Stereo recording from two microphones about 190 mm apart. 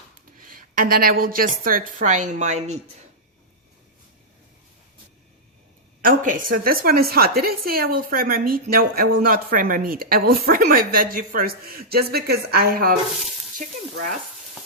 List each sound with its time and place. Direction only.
0.3 s a woman's voice: 45° right (ahead or behind)
6.0 s a woman's voice: 45° right (ahead or behind)